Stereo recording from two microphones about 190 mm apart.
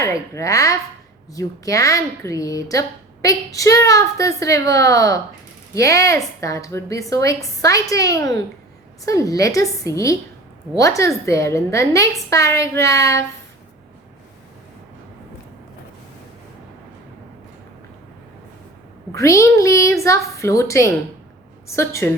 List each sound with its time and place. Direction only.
0.0 s a woman's voice: 15° left (ahead or behind)
19.1 s speech: 15° left (ahead or behind)